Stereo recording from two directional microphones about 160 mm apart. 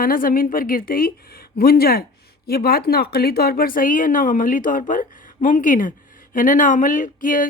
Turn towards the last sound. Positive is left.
turn(degrees=55)  # may be behind; listen again after turning